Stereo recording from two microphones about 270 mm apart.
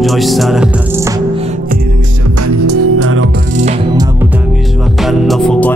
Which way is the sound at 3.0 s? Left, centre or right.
Right.